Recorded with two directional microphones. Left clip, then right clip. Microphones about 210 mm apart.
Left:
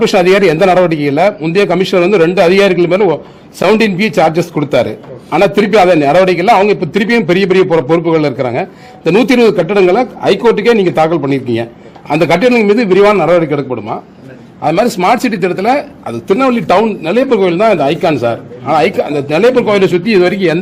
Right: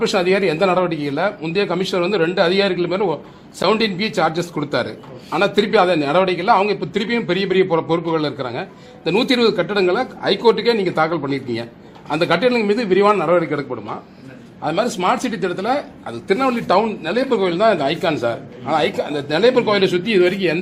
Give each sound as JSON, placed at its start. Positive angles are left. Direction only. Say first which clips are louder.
{"t": 0.0, "sound": "a man's voice", "louder": "left 9 dB", "side_deg": 50}